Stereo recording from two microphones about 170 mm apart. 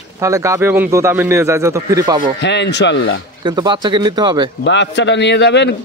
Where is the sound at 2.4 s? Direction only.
90° left.